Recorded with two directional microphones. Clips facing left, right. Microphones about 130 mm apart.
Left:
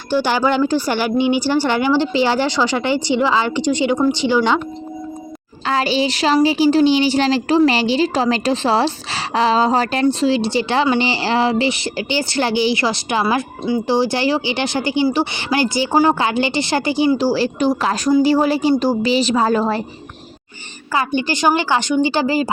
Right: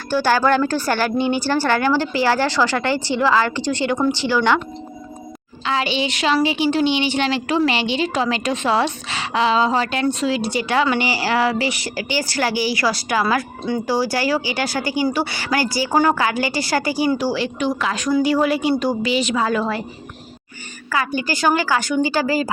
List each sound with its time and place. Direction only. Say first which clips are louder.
0.1 s speech: even; 15° left (ahead or behind)
5.6 s a woman's voice: left 3 dB; 40° left (ahead or behind); by 13.2 s 25° left (ahead or behind)
13.2 s speech: left 2 dB; 10° left (ahead or behind)
13.8 s a woman's voice: left 3 dB; 25° left (ahead or behind)
17.2 s a woman's voice: left 4 dB; 35° left (ahead or behind)
20.9 s a woman's voice: left 3 dB; 25° left (ahead or behind)